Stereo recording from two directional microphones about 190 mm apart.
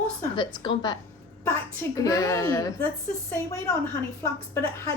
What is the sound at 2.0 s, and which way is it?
Speech, 15° left (ahead or behind).